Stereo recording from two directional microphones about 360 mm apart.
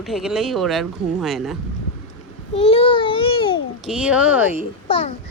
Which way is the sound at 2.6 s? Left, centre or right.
Centre.